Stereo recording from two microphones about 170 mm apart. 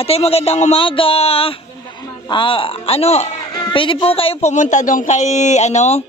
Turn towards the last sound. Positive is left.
turn(degrees=40)  # may be behind; listen again after turning